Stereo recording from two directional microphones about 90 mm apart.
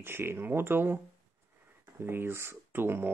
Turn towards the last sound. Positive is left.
turn(degrees=-25)  # may be behind; listen again after turning